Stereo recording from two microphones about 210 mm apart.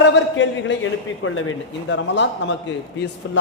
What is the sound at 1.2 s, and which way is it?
A man's voice, 70° left (ahead or behind).